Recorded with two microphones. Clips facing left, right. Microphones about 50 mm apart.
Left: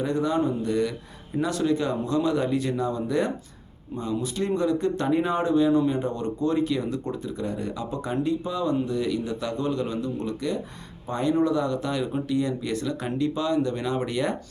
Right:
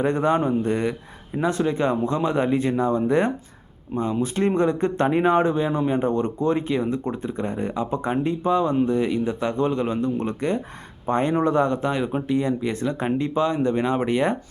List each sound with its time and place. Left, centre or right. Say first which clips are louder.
0.0 s speech: right 4 dB; right